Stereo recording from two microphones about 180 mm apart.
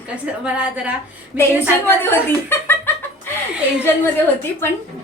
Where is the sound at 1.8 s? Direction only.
10° left (ahead or behind).